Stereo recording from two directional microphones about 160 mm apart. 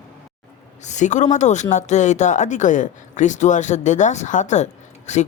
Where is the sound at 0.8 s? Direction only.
50° left (ahead or behind).